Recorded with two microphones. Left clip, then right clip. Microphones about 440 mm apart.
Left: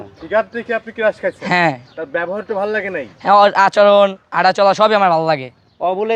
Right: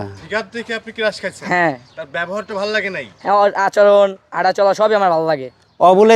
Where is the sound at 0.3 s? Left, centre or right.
Right.